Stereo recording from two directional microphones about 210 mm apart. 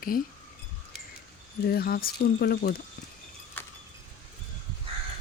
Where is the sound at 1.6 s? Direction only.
45° left (ahead or behind).